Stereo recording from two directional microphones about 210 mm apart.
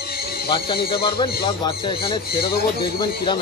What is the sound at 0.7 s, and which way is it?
Speech, 45° left (ahead or behind).